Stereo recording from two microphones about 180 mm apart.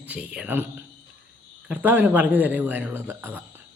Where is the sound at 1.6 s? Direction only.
10° right (ahead or behind).